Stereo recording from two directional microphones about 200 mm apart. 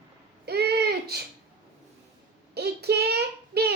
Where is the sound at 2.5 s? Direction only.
55° right (ahead or behind).